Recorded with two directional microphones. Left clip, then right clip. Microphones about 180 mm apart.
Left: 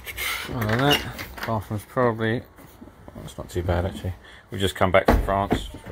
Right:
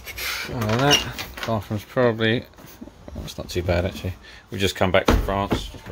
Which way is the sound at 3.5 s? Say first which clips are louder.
Right 3 dB; 25° right (ahead or behind).